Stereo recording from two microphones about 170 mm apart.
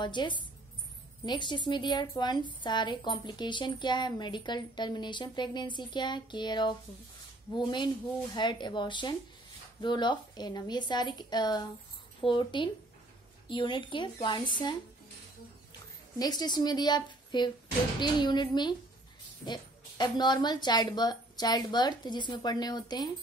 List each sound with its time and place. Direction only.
0.0 s a woman's voice: 25° left (ahead or behind)
16.2 s a woman's voice: 25° left (ahead or behind)